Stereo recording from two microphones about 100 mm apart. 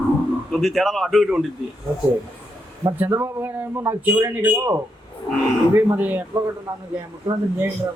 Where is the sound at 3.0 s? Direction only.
30° right (ahead or behind).